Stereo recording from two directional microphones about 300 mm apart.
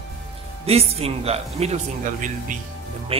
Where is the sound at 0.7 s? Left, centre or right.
Centre.